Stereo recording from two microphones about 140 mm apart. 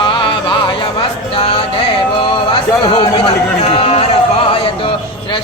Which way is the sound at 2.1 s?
40° left (ahead or behind).